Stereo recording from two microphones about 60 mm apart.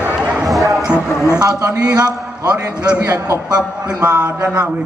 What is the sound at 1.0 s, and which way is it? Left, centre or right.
Speech, left.